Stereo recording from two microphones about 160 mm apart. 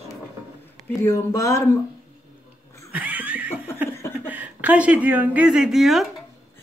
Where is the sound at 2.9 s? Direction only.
10° right (ahead or behind).